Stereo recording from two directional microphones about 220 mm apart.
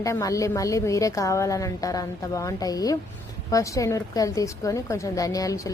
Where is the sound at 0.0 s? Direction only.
15° left (ahead or behind).